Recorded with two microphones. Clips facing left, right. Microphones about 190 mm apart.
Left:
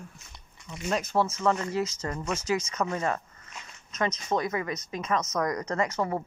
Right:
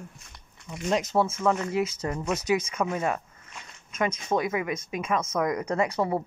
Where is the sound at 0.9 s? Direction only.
20° right (ahead or behind).